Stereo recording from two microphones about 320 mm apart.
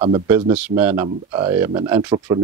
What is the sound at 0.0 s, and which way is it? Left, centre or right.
Speech, centre.